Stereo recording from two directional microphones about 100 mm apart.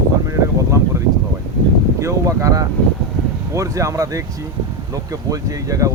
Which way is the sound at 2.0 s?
30° right (ahead or behind).